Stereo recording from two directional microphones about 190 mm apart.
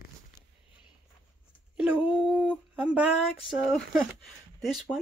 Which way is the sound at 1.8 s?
5° right (ahead or behind).